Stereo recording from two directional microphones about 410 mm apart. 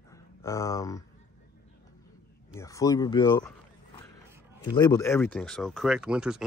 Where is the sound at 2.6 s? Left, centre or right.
Centre.